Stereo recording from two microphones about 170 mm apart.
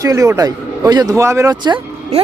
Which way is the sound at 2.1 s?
40° right (ahead or behind).